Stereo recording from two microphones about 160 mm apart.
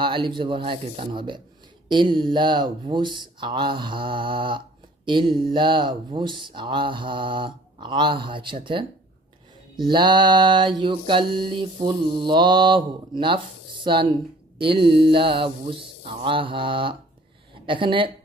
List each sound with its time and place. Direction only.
0.0 s speech: 30° right (ahead or behind)
14.6 s speech: 30° right (ahead or behind)